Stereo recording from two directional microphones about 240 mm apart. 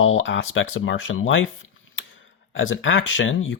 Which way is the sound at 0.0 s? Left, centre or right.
Left.